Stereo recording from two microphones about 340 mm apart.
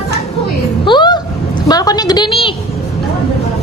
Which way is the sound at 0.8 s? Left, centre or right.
Centre.